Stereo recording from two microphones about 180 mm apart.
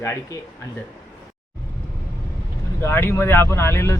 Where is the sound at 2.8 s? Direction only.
15° left (ahead or behind).